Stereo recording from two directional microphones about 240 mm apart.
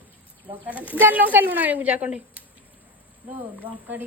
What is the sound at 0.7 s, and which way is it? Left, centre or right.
A woman's voice, centre.